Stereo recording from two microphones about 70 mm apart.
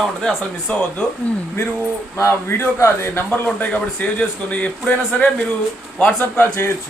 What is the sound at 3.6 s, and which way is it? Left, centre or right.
A man's voice, centre.